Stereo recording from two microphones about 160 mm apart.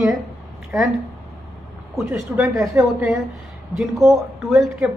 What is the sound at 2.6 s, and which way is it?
Speech, 20° right (ahead or behind).